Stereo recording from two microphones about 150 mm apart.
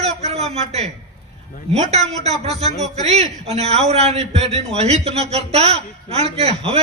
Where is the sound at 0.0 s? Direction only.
45° right (ahead or behind).